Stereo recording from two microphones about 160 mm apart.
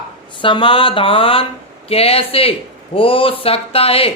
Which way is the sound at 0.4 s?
30° left (ahead or behind).